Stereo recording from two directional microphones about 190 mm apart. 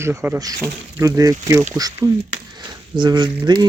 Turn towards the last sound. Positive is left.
turn(degrees=-25)  # may be behind; listen again after turning